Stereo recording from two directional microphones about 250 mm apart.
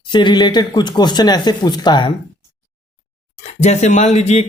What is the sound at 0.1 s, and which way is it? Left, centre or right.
A man's voice, centre.